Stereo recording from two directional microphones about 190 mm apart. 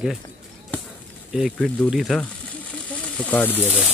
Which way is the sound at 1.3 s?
Centre (ahead or behind).